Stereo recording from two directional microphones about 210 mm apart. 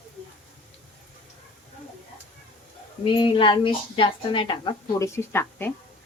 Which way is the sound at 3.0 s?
25° left (ahead or behind).